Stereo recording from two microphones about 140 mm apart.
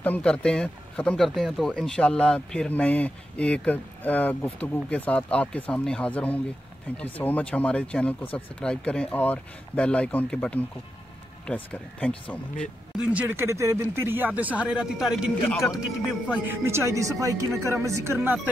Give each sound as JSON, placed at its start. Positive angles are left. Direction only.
{"t": 0.0, "sound": "speech", "side_deg": 10}
{"t": 12.9, "sound": "speech", "side_deg": -10}
{"t": 16.4, "sound": "speech", "side_deg": -20}